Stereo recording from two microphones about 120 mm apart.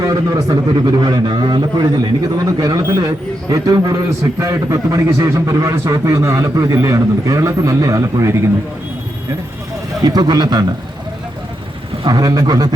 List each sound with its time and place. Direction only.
0.0 s a man's voice: 30° right (ahead or behind)
10.0 s a man's voice: 35° right (ahead or behind)
12.0 s a man's voice: 35° right (ahead or behind)